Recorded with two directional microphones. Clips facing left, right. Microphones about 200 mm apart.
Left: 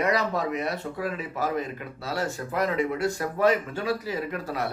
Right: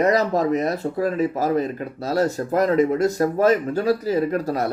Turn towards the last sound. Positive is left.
turn(degrees=-40)  # may be behind; listen again after turning